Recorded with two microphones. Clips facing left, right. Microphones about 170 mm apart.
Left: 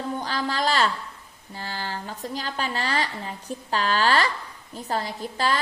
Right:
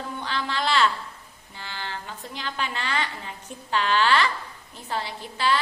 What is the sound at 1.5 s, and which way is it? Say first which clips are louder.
A woman's voice: left 3 dB; 40° left (ahead or behind).